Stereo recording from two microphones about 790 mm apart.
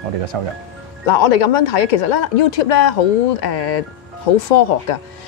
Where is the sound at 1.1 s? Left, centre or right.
Left.